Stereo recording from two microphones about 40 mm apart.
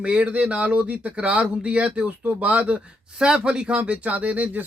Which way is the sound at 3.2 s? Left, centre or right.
Right.